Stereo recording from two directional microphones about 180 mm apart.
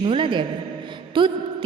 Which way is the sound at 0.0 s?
30° right (ahead or behind).